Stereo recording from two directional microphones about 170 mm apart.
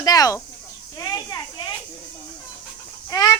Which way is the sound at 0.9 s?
20° left (ahead or behind).